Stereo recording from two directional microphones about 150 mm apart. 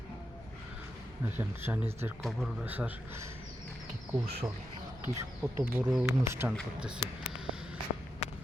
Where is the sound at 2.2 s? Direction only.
Centre (ahead or behind).